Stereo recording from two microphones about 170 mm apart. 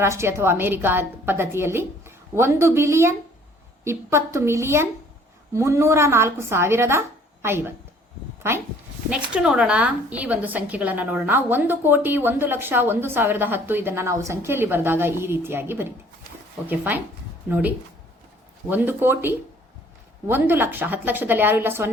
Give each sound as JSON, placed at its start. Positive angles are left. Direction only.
{"t": 0.0, "sound": "a woman's voice", "side_deg": -15}